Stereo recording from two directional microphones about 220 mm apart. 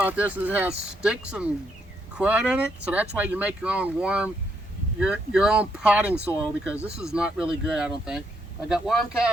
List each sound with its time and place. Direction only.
0.0 s speech: 5° right (ahead or behind)